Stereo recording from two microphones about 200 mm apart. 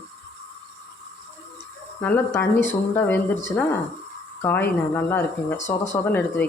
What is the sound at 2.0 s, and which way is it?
Speech, 10° left (ahead or behind).